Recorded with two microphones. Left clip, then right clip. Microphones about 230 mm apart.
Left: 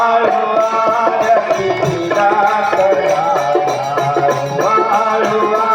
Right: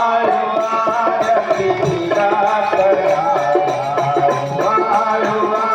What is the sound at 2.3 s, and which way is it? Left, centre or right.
Music, left.